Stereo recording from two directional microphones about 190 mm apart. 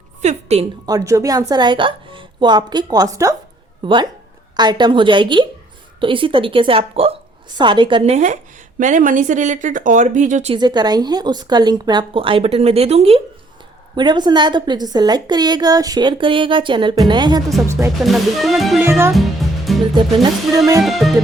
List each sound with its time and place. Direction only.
0.2 s a woman's voice: 35° right (ahead or behind)
0.9 s a woman's voice: 15° right (ahead or behind); by 10.5 s 40° right (ahead or behind)
10.5 s a woman's voice: 20° right (ahead or behind)
17.7 s music: 15° right (ahead or behind)
18.0 s music: centre (ahead or behind)
18.8 s music: 15° right (ahead or behind)
19.1 s music: centre (ahead or behind)
20.8 s music: centre (ahead or behind)